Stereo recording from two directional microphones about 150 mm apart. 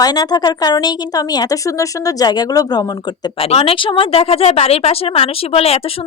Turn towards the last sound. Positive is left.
turn(degrees=40)  # may be behind; listen again after turning